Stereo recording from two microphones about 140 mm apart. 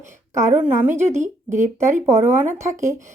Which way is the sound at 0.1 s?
20° right (ahead or behind).